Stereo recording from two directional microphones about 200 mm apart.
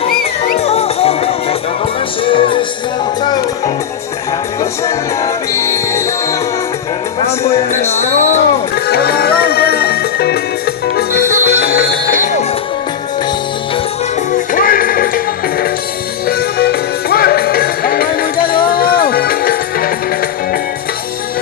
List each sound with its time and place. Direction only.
0.6 s music: 30° left (ahead or behind)
4.6 s music: 15° left (ahead or behind)
7.3 s music: 30° left (ahead or behind)
8.7 s music: 55° left (ahead or behind)
14.5 s music: 45° left (ahead or behind)